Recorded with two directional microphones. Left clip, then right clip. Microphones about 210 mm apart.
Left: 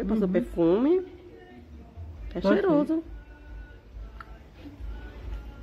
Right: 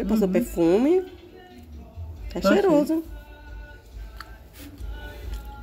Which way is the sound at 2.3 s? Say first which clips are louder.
Right 4 dB; 5° left (ahead or behind).